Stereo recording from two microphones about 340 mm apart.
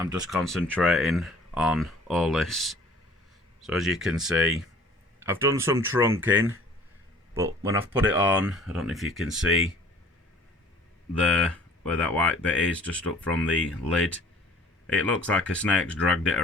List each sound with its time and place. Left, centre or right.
0.0 s speech: centre
11.2 s speech: centre